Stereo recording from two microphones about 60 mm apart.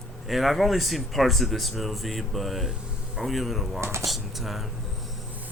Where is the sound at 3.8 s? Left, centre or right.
Right.